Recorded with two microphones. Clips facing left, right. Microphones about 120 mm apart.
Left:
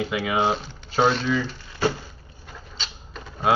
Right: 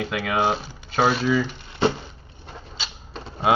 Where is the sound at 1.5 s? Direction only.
25° right (ahead or behind).